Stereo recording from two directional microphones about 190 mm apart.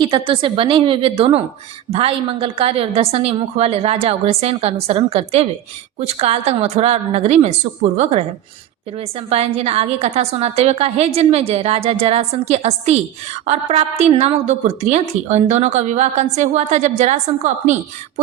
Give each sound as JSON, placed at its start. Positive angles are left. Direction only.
{"t": 0.0, "sound": "a woman's voice", "side_deg": -25}